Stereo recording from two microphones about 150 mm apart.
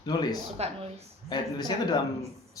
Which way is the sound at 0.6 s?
45° right (ahead or behind).